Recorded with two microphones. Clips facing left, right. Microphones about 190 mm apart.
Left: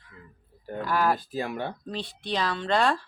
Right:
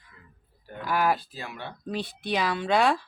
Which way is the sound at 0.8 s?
5° right (ahead or behind).